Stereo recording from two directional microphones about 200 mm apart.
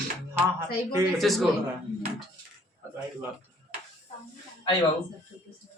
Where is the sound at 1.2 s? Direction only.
Centre (ahead or behind).